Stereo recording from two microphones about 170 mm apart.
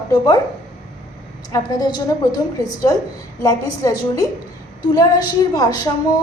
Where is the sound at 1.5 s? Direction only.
20° left (ahead or behind).